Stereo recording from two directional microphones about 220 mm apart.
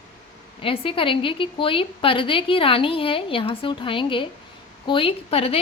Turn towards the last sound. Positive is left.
turn(degrees=25)  # may be behind; listen again after turning